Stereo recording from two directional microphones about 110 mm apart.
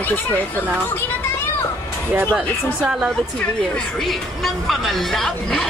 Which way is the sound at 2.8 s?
10° right (ahead or behind).